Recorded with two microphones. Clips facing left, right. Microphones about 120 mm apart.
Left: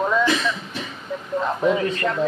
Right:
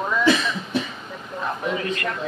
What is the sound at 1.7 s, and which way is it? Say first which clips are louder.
Speech: left 4 dB; 30° left (ahead or behind).